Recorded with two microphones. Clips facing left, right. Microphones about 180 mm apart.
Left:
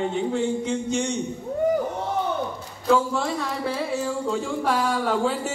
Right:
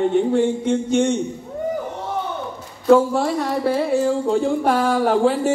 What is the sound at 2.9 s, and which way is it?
Speech, 50° right (ahead or behind).